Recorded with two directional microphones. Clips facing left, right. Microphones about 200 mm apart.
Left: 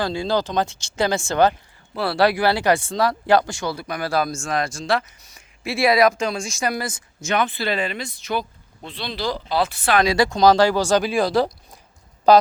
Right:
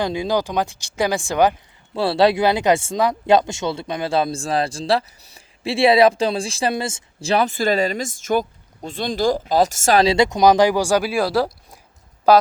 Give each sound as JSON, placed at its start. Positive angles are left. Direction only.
{"t": 0.0, "sound": "speech", "side_deg": -15}
{"t": 2.0, "sound": "speech", "side_deg": -25}
{"t": 10.0, "sound": "speech", "side_deg": -25}